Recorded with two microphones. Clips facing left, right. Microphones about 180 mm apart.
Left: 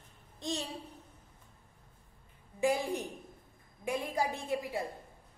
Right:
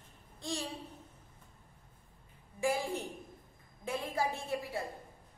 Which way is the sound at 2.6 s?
20° left (ahead or behind).